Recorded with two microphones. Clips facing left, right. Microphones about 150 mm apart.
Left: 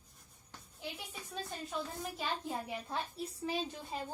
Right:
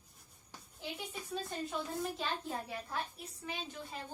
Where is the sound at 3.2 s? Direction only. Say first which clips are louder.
Left 7 dB; 35° left (ahead or behind).